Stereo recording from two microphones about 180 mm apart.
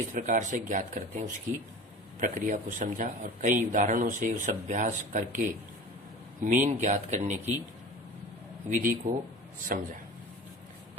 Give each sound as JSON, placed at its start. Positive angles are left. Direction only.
{"t": 0.1, "sound": "speech", "side_deg": -45}
{"t": 6.4, "sound": "speech", "side_deg": -45}
{"t": 8.7, "sound": "speech", "side_deg": -50}